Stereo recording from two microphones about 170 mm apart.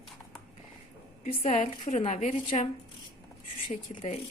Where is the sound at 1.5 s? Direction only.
45° left (ahead or behind).